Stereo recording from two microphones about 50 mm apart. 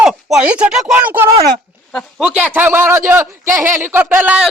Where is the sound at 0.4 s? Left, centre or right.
Right.